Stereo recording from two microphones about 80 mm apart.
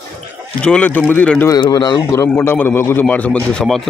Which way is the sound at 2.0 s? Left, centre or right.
Left.